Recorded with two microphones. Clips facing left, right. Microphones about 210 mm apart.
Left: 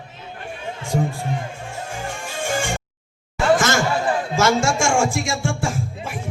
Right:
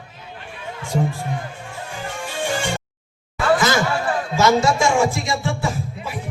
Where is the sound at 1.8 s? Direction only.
45° left (ahead or behind).